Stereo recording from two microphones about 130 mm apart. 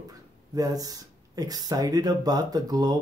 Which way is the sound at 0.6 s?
30° right (ahead or behind).